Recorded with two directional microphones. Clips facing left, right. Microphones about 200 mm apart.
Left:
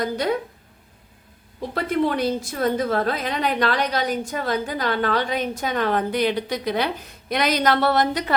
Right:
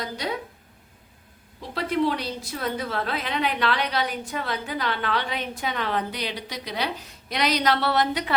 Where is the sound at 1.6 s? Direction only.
50° left (ahead or behind).